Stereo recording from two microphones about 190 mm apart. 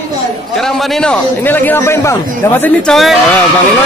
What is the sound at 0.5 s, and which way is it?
A man's voice, centre (ahead or behind).